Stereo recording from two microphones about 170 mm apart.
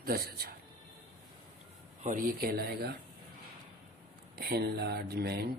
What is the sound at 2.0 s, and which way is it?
Speech, 55° right (ahead or behind).